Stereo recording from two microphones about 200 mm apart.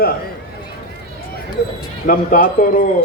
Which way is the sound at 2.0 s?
45° left (ahead or behind).